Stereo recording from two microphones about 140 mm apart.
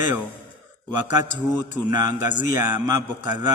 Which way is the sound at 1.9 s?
20° right (ahead or behind).